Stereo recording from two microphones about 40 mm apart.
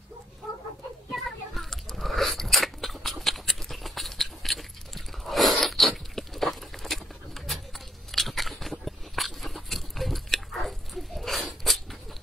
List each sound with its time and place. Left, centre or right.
1.1 s biting: centre
5.6 s a sound: centre
8.1 s biting: centre